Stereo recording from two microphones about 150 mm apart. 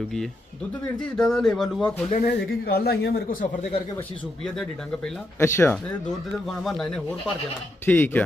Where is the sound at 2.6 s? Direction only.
90° left.